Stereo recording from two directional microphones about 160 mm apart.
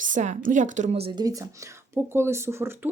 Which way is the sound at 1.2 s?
20° right (ahead or behind).